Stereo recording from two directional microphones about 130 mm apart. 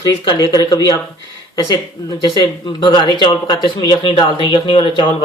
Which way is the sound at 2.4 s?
35° left (ahead or behind).